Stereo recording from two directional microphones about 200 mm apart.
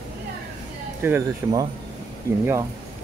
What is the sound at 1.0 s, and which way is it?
Speech, 15° right (ahead or behind).